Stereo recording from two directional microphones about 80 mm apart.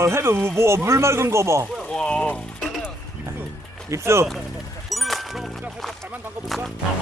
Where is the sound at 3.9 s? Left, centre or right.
Right.